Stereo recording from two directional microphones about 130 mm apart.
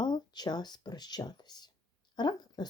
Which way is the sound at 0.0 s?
35° left (ahead or behind).